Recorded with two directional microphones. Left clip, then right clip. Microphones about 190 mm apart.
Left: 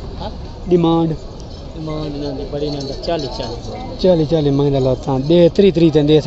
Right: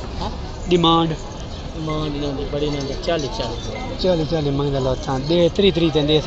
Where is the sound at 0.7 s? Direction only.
35° left (ahead or behind).